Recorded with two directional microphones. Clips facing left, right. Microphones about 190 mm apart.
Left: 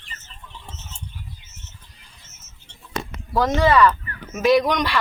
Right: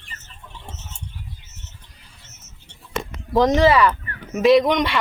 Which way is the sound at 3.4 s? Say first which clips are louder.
Right 2 dB; 15° right (ahead or behind).